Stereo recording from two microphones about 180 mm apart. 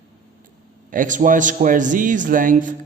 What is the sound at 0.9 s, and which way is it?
A man's voice, 45° right (ahead or behind).